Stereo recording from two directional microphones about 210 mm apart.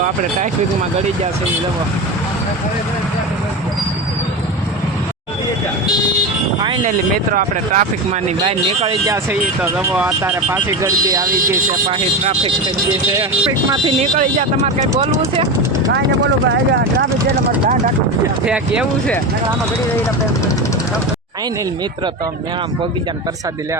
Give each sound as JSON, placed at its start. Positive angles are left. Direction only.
{"t": 6.6, "sound": "speech", "side_deg": -25}
{"t": 7.3, "sound": "speech", "side_deg": -35}
{"t": 8.4, "sound": "speech", "side_deg": -25}
{"t": 9.3, "sound": "speech", "side_deg": -5}
{"t": 14.0, "sound": "speech", "side_deg": -35}
{"t": 18.4, "sound": "speech", "side_deg": -5}